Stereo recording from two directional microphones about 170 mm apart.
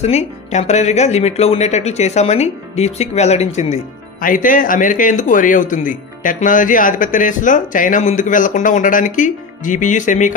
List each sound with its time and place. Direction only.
0.0 s speech: 40° left (ahead or behind)
3.7 s speech: 50° left (ahead or behind)